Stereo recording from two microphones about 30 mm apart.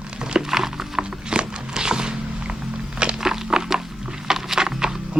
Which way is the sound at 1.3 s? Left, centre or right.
Right.